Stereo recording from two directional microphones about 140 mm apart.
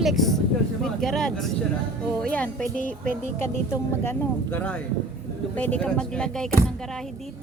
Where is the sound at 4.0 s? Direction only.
15° left (ahead or behind).